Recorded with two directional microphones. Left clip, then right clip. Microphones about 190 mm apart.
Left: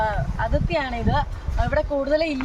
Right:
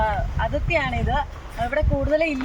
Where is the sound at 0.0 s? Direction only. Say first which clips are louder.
Right 1 dB; 10° left (ahead or behind).